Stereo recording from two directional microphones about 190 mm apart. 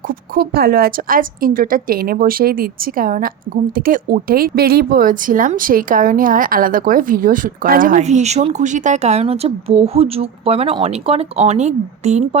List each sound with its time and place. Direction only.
0.1 s speech: 55° right (ahead or behind); by 12.4 s 35° right (ahead or behind)